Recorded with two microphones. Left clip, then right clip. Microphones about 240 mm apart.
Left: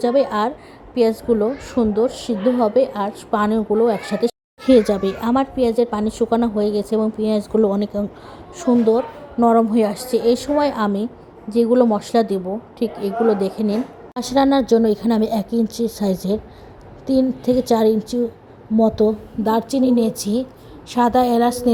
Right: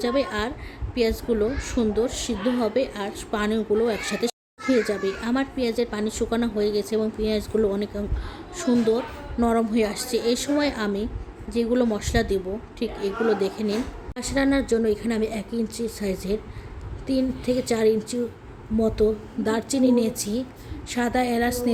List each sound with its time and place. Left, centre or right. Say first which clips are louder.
0.0 s a woman's voice: left 7 dB; centre
4.6 s a woman's voice: left 8 dB; left